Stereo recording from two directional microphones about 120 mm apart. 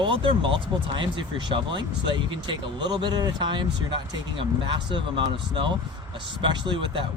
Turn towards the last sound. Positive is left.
turn(degrees=-40)  # may be behind; listen again after turning